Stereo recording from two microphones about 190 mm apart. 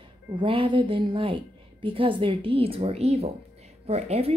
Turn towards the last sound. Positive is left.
turn(degrees=-30)  # may be behind; listen again after turning